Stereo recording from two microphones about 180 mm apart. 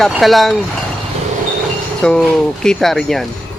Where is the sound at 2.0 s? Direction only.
5° left (ahead or behind).